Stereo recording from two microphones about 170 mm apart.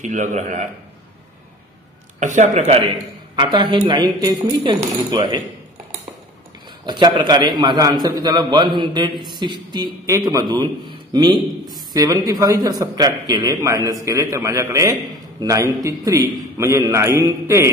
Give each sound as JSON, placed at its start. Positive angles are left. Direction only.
{"t": 0.0, "sound": "a man's voice", "side_deg": -45}
{"t": 2.1, "sound": "a man's voice", "side_deg": -45}
{"t": 3.5, "sound": "speech", "side_deg": -25}
{"t": 6.9, "sound": "speech", "side_deg": -25}
{"t": 11.3, "sound": "a man's voice", "side_deg": 0}
{"t": 11.9, "sound": "speech", "side_deg": -20}